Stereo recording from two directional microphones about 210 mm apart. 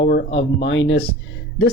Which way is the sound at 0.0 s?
60° left (ahead or behind).